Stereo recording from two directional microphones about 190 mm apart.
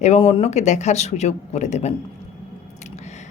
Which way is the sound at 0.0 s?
35° left (ahead or behind).